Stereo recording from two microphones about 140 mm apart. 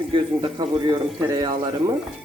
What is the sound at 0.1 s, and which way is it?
A man's voice, 35° right (ahead or behind).